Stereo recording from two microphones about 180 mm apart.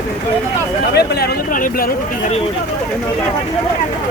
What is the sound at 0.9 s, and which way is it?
Speech, 60° left (ahead or behind).